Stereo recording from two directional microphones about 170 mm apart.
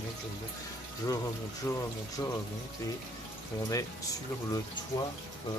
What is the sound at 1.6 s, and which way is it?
Speech, 20° left (ahead or behind).